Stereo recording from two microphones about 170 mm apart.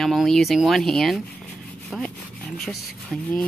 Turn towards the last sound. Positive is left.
turn(degrees=5)  # may be behind; listen again after turning